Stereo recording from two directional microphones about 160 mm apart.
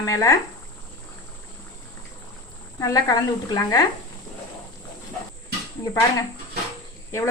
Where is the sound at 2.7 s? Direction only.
20° left (ahead or behind).